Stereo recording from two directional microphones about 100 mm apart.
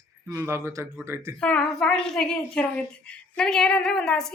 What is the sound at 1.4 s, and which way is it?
A woman's voice, 10° left (ahead or behind).